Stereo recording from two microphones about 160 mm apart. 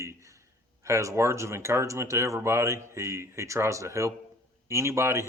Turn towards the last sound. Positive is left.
turn(degrees=-15)  # may be behind; listen again after turning